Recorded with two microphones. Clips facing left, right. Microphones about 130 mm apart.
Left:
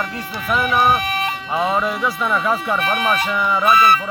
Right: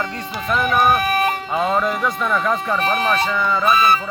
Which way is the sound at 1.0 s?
50° right (ahead or behind).